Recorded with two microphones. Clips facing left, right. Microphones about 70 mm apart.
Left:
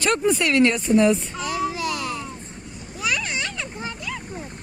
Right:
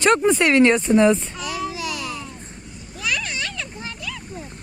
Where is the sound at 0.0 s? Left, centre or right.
Right.